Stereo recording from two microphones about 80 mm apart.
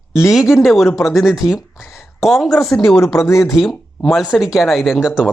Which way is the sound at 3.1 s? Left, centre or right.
Left.